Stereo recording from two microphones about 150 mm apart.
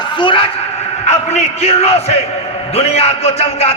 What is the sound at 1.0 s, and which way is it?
A man's voice, 50° left (ahead or behind).